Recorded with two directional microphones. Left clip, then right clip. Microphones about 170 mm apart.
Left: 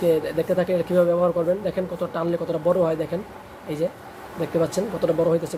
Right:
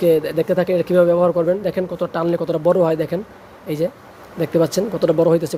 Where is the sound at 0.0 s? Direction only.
40° right (ahead or behind).